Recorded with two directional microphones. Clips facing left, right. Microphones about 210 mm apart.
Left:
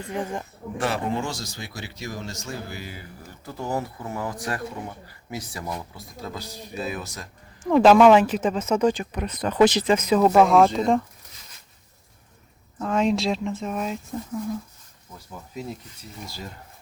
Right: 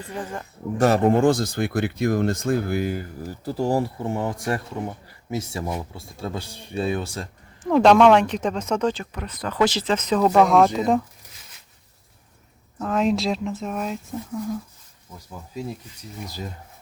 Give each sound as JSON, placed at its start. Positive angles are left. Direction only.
{"t": 0.1, "sound": "speech", "side_deg": 15}
{"t": 0.8, "sound": "speech", "side_deg": -45}
{"t": 3.4, "sound": "speech", "side_deg": -30}
{"t": 7.6, "sound": "speech", "side_deg": 0}
{"t": 12.8, "sound": "speech", "side_deg": 0}
{"t": 16.2, "sound": "speech", "side_deg": -20}